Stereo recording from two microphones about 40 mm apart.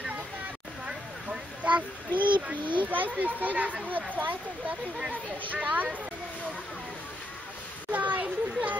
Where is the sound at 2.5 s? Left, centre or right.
Right.